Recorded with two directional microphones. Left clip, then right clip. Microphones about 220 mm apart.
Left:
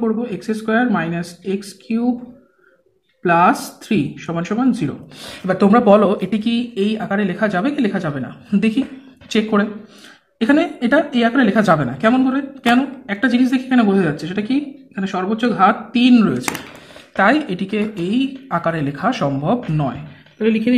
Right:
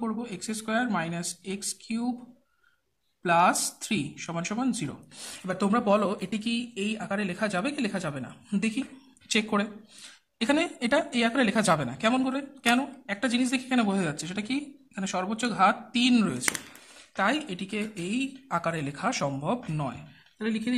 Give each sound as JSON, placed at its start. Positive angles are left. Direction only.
{"t": 0.0, "sound": "a woman's voice", "side_deg": -25}
{"t": 3.3, "sound": "a woman's voice", "side_deg": -20}
{"t": 5.5, "sound": "a woman's voice", "side_deg": -10}
{"t": 17.1, "sound": "a woman's voice", "side_deg": -10}